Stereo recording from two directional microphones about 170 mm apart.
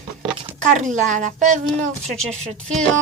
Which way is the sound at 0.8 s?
45° right (ahead or behind).